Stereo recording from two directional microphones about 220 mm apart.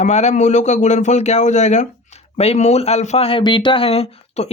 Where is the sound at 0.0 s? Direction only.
30° left (ahead or behind).